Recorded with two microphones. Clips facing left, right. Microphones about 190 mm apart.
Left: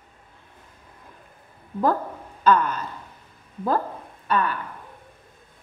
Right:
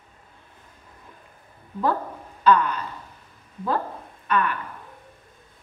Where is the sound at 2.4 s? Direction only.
45° left (ahead or behind).